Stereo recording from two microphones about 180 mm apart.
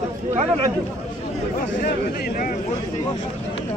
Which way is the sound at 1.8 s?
55° left (ahead or behind).